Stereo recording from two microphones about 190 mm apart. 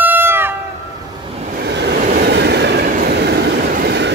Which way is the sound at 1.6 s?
65° right (ahead or behind).